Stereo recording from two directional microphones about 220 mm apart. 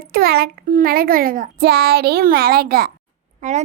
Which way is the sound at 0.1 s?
45° right (ahead or behind).